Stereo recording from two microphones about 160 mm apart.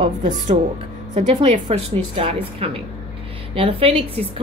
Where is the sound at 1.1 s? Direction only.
50° right (ahead or behind).